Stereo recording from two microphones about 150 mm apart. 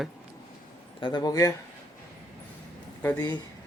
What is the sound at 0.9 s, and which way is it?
Speech, 30° left (ahead or behind).